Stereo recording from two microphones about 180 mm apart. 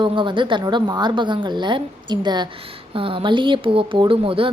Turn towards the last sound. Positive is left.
turn(degrees=-30)  # may be behind; listen again after turning